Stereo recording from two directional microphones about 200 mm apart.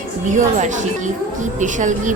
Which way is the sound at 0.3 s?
40° right (ahead or behind).